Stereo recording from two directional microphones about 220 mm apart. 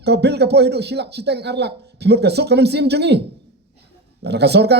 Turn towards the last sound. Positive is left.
turn(degrees=-50)  # may be behind; listen again after turning